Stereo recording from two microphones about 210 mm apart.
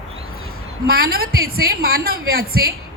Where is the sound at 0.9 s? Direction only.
45° right (ahead or behind).